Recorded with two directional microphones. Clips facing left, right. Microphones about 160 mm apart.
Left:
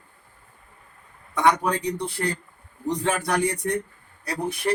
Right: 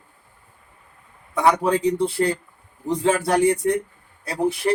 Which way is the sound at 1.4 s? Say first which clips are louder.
Right 3 dB; 30° right (ahead or behind).